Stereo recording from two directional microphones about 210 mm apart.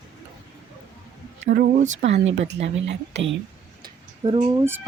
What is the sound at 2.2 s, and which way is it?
Speech, 70° right (ahead or behind).